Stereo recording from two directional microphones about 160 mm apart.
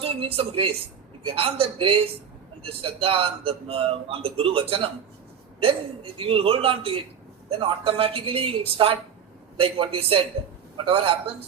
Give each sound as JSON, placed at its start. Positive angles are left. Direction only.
{"t": 0.0, "sound": "speech", "side_deg": -35}